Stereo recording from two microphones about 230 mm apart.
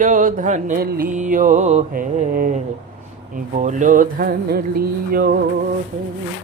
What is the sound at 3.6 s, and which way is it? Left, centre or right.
Mantra, right.